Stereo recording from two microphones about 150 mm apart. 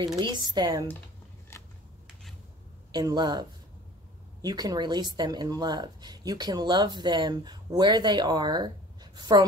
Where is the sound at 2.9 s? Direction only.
30° right (ahead or behind).